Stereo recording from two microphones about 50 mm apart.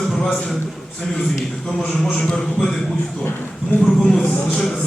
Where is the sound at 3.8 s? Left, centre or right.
Centre.